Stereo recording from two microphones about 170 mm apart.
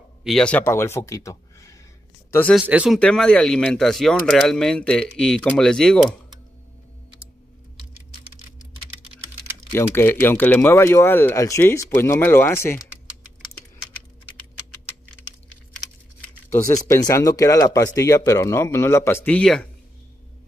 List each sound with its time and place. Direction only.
0.2 s speech: 5° left (ahead or behind); by 1.8 s 20° left (ahead or behind)
2.5 s speech: 5° right (ahead or behind)
3.0 s speech: 5° left (ahead or behind)
9.7 s speech: 15° left (ahead or behind)
16.6 s speech: 20° left (ahead or behind)